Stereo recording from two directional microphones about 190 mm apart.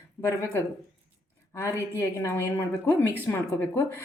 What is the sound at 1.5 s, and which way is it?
A woman's voice, 15° left (ahead or behind).